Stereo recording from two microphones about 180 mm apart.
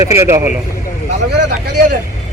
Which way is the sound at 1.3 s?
65° right (ahead or behind).